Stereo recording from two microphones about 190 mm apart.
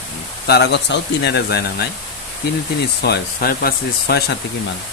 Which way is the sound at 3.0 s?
55° left (ahead or behind).